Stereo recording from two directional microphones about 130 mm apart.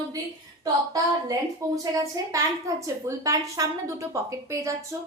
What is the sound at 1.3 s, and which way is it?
A woman's voice, 30° right (ahead or behind).